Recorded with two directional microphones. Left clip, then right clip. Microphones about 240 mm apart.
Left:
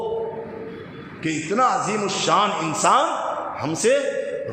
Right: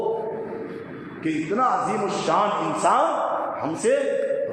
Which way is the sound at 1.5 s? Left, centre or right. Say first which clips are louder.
Left 2 dB; left.